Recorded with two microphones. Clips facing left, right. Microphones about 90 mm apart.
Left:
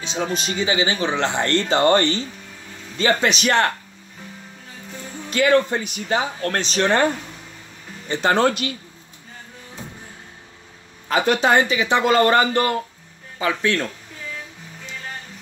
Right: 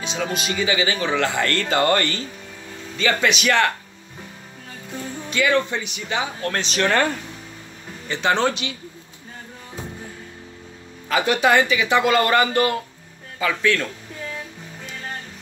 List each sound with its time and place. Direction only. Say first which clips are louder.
0.0 s speech: left 1 dB; 35° left (ahead or behind)
5.3 s speech: left 3 dB; 40° left (ahead or behind)
8.1 s speech: left 2 dB; 40° left (ahead or behind)
11.1 s speech: left 1 dB; 35° left (ahead or behind)